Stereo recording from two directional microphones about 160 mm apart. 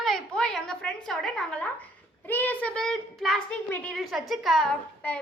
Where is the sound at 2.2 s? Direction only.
10° left (ahead or behind).